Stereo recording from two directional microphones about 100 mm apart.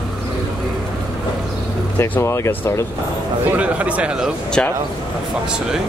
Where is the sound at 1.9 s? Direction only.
20° left (ahead or behind).